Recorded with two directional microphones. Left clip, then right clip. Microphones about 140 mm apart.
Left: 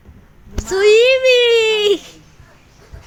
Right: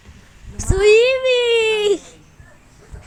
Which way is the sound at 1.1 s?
35° left (ahead or behind).